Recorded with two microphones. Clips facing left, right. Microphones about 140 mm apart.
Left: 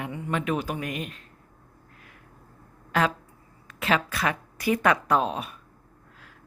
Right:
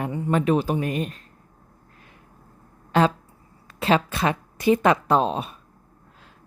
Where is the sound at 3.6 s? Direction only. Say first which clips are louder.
Right 5 dB; 30° right (ahead or behind).